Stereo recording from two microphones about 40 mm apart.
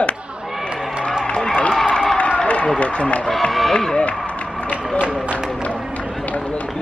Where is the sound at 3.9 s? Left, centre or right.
Left.